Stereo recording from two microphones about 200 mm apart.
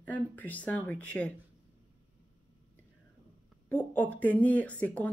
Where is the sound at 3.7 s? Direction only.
10° left (ahead or behind).